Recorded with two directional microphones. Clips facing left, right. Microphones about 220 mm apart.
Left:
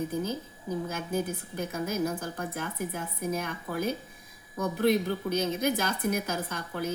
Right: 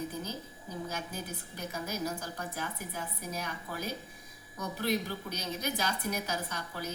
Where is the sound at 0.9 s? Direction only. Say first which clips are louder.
Left 9 dB; 55° left (ahead or behind).